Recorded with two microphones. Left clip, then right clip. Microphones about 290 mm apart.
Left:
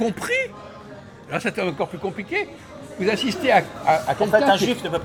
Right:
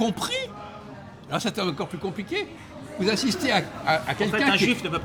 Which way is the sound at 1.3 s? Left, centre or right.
Right.